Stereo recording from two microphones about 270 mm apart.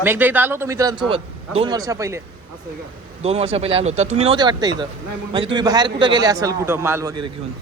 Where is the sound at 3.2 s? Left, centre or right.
Right.